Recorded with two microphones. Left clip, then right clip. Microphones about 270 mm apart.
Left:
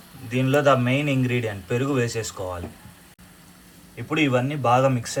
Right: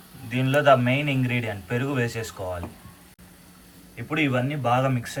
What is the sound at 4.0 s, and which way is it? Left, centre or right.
Speech, centre.